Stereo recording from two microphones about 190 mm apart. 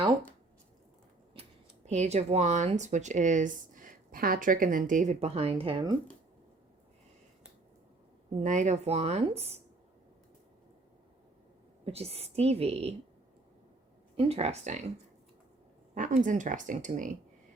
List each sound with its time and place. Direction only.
1.3 s speech: 35° right (ahead or behind)
8.4 s speech: 40° right (ahead or behind)
11.9 s speech: 30° right (ahead or behind)
14.2 s speech: 30° right (ahead or behind)
16.0 s speech: 40° right (ahead or behind)